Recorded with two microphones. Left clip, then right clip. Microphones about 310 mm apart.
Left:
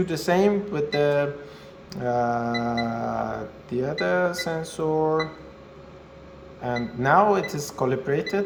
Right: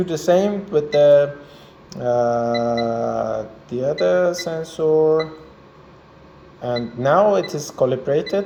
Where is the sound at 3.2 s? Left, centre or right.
Left.